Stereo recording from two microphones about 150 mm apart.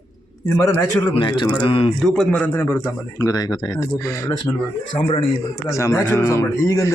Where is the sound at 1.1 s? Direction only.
35° left (ahead or behind).